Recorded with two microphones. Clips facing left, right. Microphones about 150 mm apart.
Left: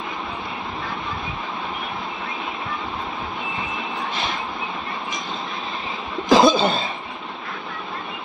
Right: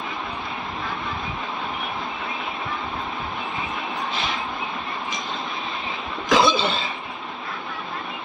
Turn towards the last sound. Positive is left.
turn(degrees=45)  # may be behind; listen again after turning